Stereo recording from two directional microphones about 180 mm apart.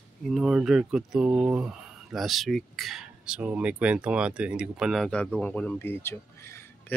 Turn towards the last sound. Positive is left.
turn(degrees=15)  # may be behind; listen again after turning